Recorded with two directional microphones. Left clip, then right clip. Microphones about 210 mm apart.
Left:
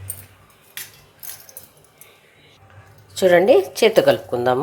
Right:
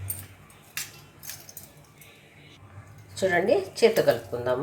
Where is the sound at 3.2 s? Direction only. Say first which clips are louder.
Left 10 dB; 50° left (ahead or behind).